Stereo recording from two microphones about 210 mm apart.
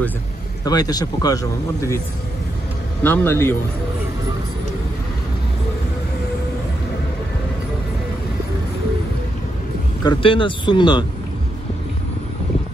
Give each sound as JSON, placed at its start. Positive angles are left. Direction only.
{"t": 0.7, "sound": "a man's voice", "side_deg": 20}
{"t": 3.0, "sound": "a man's voice", "side_deg": 10}
{"t": 10.0, "sound": "speech", "side_deg": 25}